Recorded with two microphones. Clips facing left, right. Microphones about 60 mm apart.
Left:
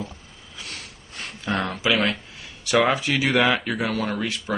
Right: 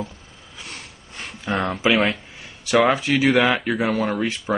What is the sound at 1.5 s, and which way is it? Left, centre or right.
Speech, centre.